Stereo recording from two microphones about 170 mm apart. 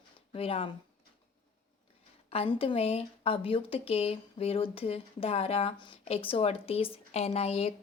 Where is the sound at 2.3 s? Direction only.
35° left (ahead or behind).